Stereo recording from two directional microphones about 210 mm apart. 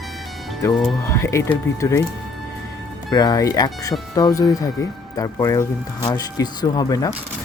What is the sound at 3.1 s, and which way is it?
Speech, 20° left (ahead or behind).